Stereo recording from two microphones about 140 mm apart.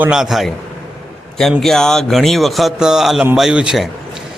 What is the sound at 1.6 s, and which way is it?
A man's voice, 5° left (ahead or behind).